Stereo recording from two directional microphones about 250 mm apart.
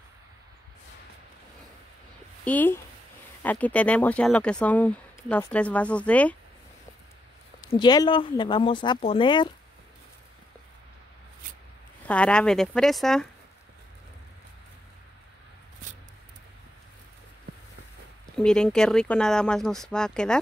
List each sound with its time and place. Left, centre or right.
2.4 s speech: centre
7.6 s speech: centre
12.1 s speech: centre
18.4 s speech: centre